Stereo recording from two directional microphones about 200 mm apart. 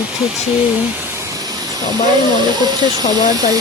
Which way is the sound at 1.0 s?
15° right (ahead or behind).